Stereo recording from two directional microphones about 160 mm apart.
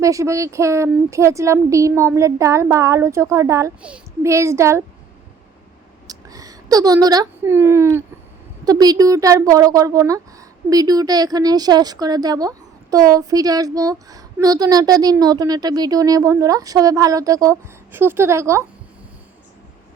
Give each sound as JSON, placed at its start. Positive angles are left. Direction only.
{"t": 0.0, "sound": "a woman's voice", "side_deg": -20}
{"t": 6.1, "sound": "a woman's voice", "side_deg": -20}